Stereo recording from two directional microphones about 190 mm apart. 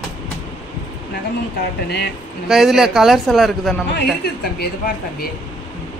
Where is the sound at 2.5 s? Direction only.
Centre (ahead or behind).